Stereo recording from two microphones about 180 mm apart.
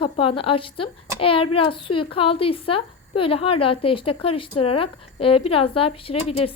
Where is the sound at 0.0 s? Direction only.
30° left (ahead or behind).